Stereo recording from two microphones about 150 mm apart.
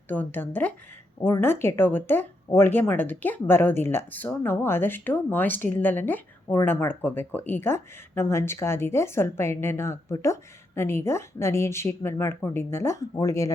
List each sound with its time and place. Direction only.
0.1 s a woman's voice: 15° left (ahead or behind)